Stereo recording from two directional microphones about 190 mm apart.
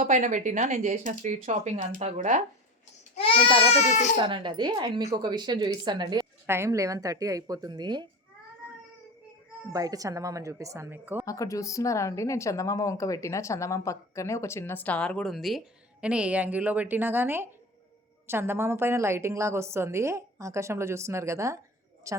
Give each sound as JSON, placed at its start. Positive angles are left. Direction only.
{"t": 0.0, "sound": "speech", "side_deg": -40}
{"t": 3.7, "sound": "speech", "side_deg": 40}
{"t": 4.2, "sound": "speech", "side_deg": -25}
{"t": 9.7, "sound": "a woman's voice", "side_deg": -20}
{"t": 11.3, "sound": "a woman's voice", "side_deg": 15}